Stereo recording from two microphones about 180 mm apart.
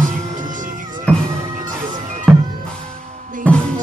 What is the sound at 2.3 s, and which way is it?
Music, centre (ahead or behind).